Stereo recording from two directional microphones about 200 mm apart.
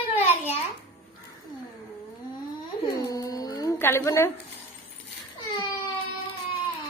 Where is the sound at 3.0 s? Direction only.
15° left (ahead or behind).